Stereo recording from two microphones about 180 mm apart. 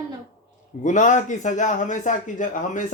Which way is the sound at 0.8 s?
45° left (ahead or behind).